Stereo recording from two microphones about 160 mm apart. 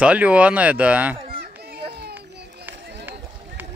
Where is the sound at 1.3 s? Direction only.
75° right (ahead or behind).